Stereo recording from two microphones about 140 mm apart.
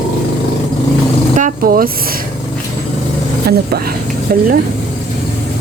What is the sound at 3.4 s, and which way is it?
Speech, 90° right.